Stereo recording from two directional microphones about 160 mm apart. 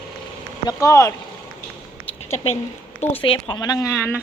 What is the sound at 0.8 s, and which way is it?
Speech, 20° left (ahead or behind).